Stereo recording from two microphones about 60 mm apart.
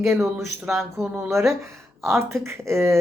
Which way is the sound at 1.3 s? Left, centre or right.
Right.